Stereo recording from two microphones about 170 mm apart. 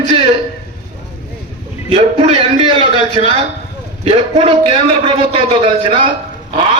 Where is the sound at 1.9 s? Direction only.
35° right (ahead or behind).